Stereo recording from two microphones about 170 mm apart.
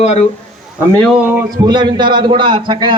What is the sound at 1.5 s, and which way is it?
A man's voice, 25° right (ahead or behind).